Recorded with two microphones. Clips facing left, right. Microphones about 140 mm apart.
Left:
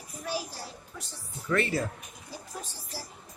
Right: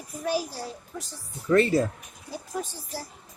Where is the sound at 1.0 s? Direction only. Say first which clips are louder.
Right 4 dB; 40° right (ahead or behind).